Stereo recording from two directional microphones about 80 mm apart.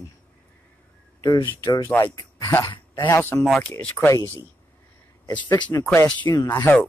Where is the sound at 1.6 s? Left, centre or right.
Left.